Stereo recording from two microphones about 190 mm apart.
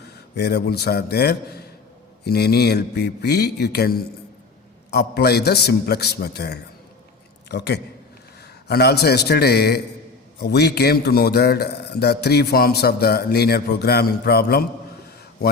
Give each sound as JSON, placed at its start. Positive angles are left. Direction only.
{"t": 0.3, "sound": "a man's voice", "side_deg": 60}